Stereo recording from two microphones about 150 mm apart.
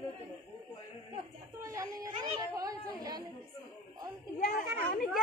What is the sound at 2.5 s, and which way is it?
Chatter, 25° right (ahead or behind).